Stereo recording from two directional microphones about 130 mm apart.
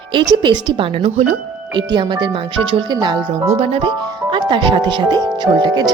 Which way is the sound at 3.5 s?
50° right (ahead or behind).